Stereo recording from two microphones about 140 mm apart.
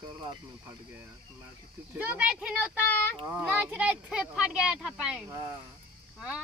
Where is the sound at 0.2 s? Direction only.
25° right (ahead or behind).